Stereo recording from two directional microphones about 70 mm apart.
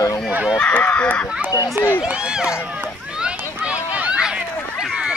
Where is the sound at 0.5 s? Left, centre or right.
Centre.